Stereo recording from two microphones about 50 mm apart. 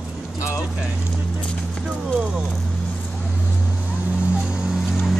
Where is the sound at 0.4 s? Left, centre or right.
Left.